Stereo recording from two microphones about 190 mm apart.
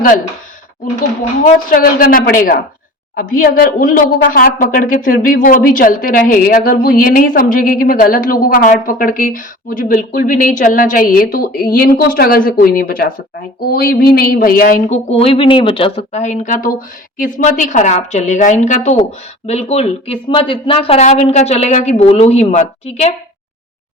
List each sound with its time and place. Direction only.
1.7 s a woman's voice: 50° left (ahead or behind)
15.1 s speech: 30° left (ahead or behind)